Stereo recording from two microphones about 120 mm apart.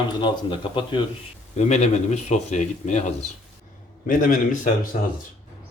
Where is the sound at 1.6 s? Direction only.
75° left (ahead or behind).